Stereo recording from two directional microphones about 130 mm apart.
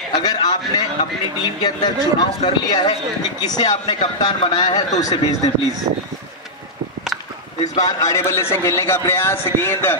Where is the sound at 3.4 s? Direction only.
30° left (ahead or behind).